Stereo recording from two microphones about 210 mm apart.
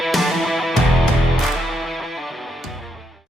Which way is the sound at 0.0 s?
Centre (ahead or behind).